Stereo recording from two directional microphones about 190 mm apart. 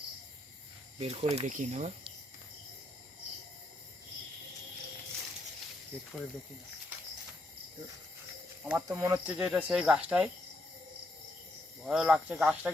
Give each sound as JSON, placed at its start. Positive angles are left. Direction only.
{"t": 0.9, "sound": "speech", "side_deg": -35}
{"t": 8.6, "sound": "speech", "side_deg": -10}
{"t": 11.9, "sound": "speech", "side_deg": -5}